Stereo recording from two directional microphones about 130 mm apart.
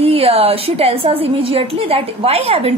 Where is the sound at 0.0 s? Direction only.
50° right (ahead or behind).